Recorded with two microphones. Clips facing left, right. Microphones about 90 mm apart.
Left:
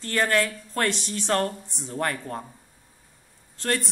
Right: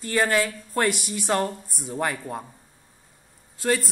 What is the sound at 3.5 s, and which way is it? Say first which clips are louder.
Speech: right 3 dB; 5° right (ahead or behind).